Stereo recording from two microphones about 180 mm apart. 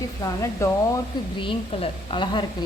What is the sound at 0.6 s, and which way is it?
Speech, 15° left (ahead or behind).